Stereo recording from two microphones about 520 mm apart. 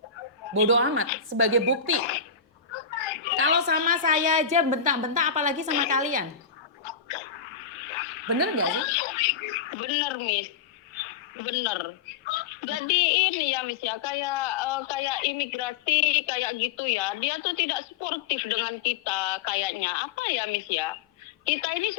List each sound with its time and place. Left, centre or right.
0.5 s a woman's voice: right
2.7 s a sound: left
3.3 s a woman's voice: right
6.8 s a sound: left
8.3 s a woman's voice: right
8.7 s speech: left